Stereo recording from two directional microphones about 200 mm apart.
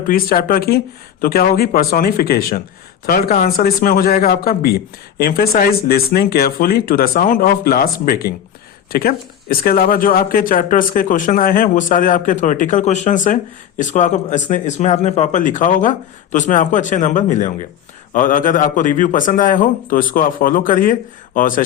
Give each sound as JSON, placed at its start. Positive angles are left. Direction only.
{"t": 0.1, "sound": "speech", "side_deg": 45}